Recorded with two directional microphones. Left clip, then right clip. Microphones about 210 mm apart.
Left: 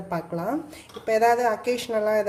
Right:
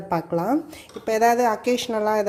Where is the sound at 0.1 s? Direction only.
35° right (ahead or behind).